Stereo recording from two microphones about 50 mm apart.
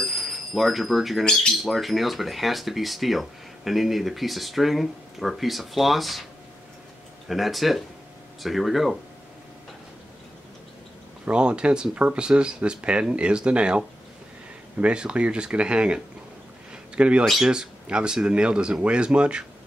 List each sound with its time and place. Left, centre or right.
0.0 s speech: centre
7.2 s speech: centre
11.2 s speech: centre